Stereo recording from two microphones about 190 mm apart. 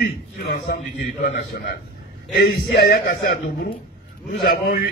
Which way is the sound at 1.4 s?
50° left (ahead or behind).